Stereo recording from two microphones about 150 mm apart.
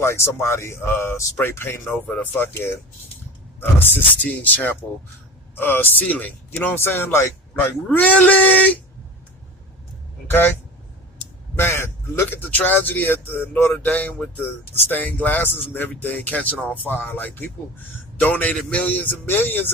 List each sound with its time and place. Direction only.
0.0 s speech: 20° left (ahead or behind)
10.2 s speech: 15° left (ahead or behind)
11.5 s speech: 15° left (ahead or behind)